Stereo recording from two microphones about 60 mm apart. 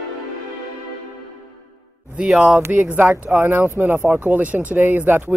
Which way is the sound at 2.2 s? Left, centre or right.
Centre.